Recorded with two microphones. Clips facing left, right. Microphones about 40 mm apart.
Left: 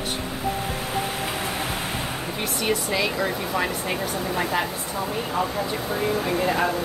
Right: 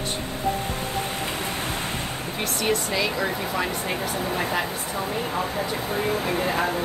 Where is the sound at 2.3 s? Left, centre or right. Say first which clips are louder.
Right 1 dB; centre.